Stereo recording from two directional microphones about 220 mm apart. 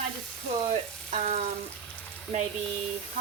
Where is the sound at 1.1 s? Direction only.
30° right (ahead or behind).